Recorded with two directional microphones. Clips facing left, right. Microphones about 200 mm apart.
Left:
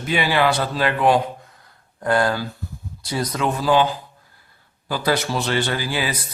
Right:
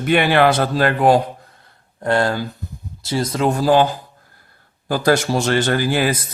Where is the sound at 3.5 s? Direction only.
45° right (ahead or behind).